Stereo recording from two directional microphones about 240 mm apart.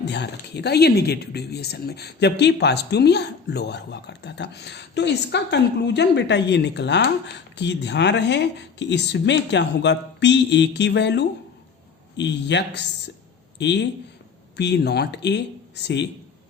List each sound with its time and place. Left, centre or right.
0.0 s speech: left